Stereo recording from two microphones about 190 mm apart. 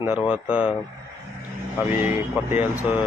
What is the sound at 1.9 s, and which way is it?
Speech, 10° right (ahead or behind).